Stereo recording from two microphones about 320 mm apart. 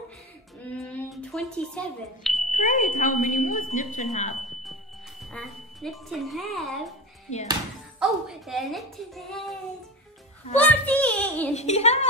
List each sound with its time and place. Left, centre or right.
0.8 s a sound: centre
2.6 s a woman's voice: left
5.2 s speech: centre
7.3 s a woman's voice: left
8.0 s a woman's voice: centre
10.6 s a woman's voice: centre
11.5 s a woman's voice: left